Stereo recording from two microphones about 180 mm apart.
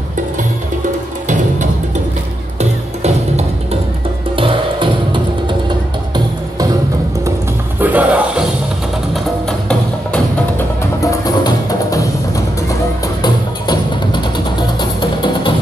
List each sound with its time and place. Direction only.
1.2 s music: 40° right (ahead or behind); by 5.6 s 25° right (ahead or behind)
7.8 s music: 10° right (ahead or behind)
9.1 s music: 5° left (ahead or behind)
11.0 s music: 20° left (ahead or behind)
13.2 s music: 25° left (ahead or behind)